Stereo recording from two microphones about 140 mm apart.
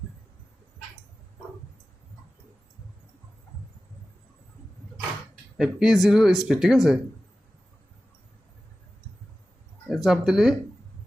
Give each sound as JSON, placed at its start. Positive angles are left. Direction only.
{"t": 5.5, "sound": "speech", "side_deg": -5}
{"t": 9.9, "sound": "speech", "side_deg": 0}